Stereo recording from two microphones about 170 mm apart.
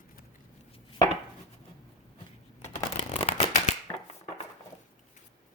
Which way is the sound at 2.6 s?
40° left (ahead or behind).